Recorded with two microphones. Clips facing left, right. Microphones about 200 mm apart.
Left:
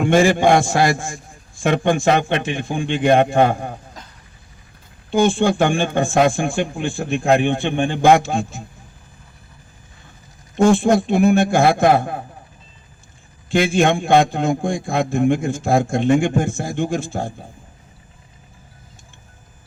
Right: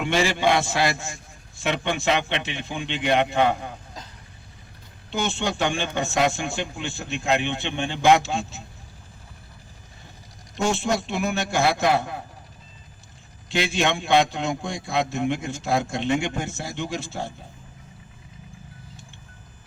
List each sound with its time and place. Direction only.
0.0 s a man's voice: 50° left (ahead or behind)
5.1 s a man's voice: 50° left (ahead or behind)
10.6 s a man's voice: 55° left (ahead or behind)
13.5 s a man's voice: 50° left (ahead or behind)